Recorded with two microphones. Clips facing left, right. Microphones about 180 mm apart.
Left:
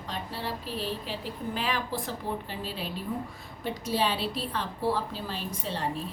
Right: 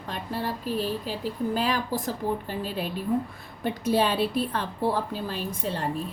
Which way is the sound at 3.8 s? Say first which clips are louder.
Right 5 dB; 55° right (ahead or behind).